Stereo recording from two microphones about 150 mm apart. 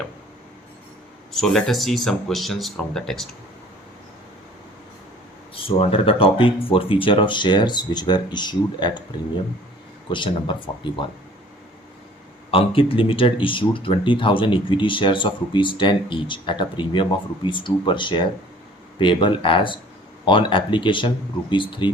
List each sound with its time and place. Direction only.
1.3 s speech: centre (ahead or behind)
5.5 s speech: 40° left (ahead or behind)
10.1 s speech: 30° left (ahead or behind)
12.5 s speech: 40° left (ahead or behind)